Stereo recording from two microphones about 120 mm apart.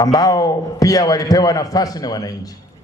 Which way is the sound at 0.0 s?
30° left (ahead or behind).